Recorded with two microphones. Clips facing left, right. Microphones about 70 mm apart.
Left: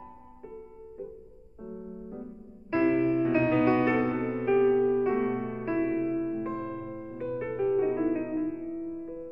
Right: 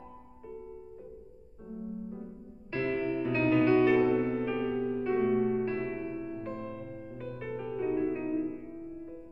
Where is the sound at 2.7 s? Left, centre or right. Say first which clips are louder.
Left 7 dB; centre.